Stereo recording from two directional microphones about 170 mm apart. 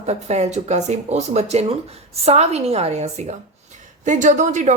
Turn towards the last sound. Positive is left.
turn(degrees=-45)  # may be behind; listen again after turning